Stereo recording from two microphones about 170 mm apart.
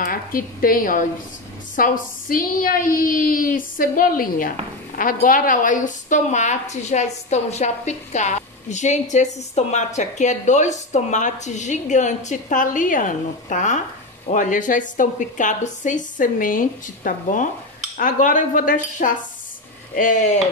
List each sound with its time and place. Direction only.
0.0 s a woman's voice: 55° left (ahead or behind)